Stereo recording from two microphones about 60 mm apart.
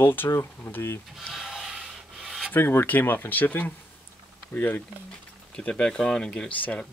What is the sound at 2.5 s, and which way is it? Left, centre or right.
Speech, left.